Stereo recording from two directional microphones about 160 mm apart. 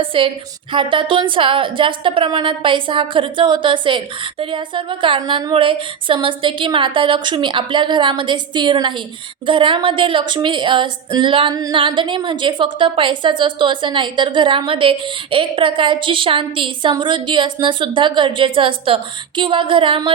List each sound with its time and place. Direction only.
0.0 s a woman's voice: 35° right (ahead or behind)